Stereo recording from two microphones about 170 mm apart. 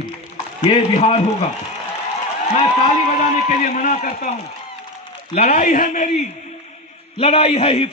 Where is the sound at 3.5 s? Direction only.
50° left (ahead or behind).